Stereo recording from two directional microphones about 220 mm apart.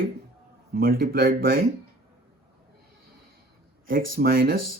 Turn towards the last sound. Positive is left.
turn(degrees=-40)  # may be behind; listen again after turning